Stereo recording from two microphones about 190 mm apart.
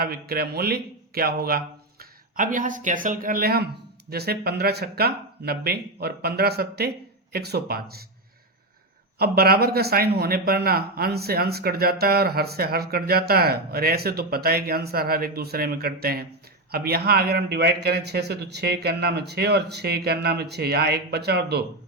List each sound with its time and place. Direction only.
0.0 s a man's voice: 55° right (ahead or behind)
9.1 s a man's voice: 55° right (ahead or behind)